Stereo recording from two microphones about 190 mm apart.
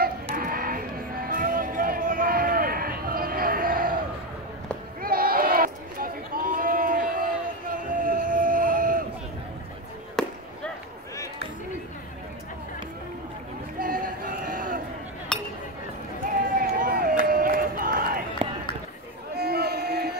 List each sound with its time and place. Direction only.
0.4 s music: 50° right (ahead or behind)
5.0 s a sound: 50° right (ahead or behind)
10.2 s basketball bounce: 5° left (ahead or behind)
13.7 s run: 50° right (ahead or behind)
15.3 s chink: 5° left (ahead or behind)
16.5 s run: 50° right (ahead or behind)
19.3 s a sound: 55° right (ahead or behind)